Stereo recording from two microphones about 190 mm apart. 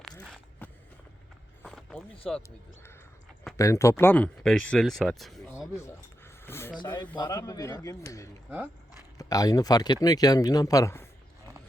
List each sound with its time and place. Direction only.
0.6 s walk: 10° left (ahead or behind)
1.6 s a sound: centre (ahead or behind)
2.3 s speech: centre (ahead or behind)
3.6 s speech: 15° left (ahead or behind)
5.5 s a sound: 15° left (ahead or behind)
6.7 s speech: 25° left (ahead or behind)